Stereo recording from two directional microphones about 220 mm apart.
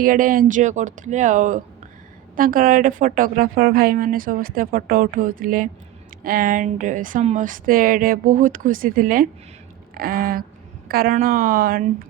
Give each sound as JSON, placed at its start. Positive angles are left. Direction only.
{"t": 0.0, "sound": "a woman's voice", "side_deg": -40}